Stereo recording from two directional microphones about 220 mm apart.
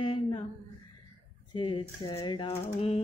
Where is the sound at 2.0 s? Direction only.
20° left (ahead or behind).